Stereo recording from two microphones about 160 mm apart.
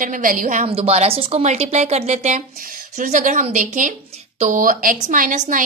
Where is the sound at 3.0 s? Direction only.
55° right (ahead or behind).